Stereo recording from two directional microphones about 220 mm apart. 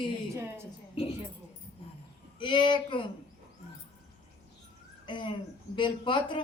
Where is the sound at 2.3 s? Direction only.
20° left (ahead or behind).